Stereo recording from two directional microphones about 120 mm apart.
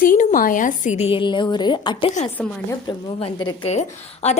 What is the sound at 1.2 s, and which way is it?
Speech, 40° left (ahead or behind).